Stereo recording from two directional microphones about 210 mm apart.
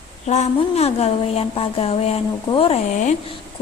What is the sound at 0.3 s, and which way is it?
Speech, 30° left (ahead or behind).